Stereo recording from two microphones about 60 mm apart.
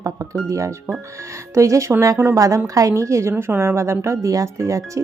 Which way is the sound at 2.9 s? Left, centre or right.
Right.